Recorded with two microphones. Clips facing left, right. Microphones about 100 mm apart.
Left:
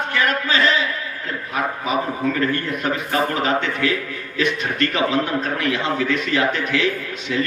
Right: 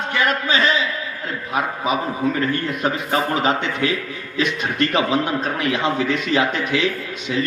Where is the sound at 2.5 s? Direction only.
20° right (ahead or behind).